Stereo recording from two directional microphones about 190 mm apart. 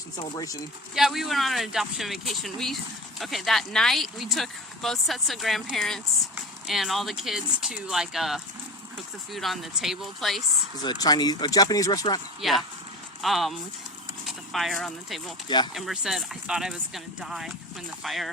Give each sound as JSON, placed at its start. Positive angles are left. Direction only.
{"t": 0.2, "sound": "speech", "side_deg": 20}
{"t": 0.9, "sound": "speech", "side_deg": 0}
{"t": 10.8, "sound": "speech", "side_deg": 20}
{"t": 12.4, "sound": "speech", "side_deg": 0}
{"t": 15.4, "sound": "speech", "side_deg": 25}
{"t": 15.7, "sound": "speech", "side_deg": 0}